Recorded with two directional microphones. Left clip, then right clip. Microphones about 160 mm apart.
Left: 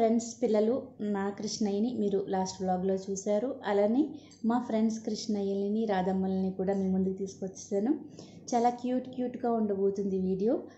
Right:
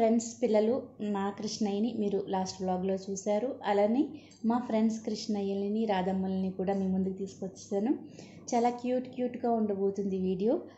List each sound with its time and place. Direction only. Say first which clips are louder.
0.2 s a woman's voice: even; 20° left (ahead or behind)
8.5 s a woman's voice: left 1 dB; 20° left (ahead or behind)